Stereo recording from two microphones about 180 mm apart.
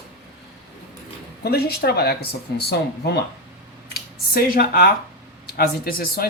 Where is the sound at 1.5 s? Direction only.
60° left (ahead or behind).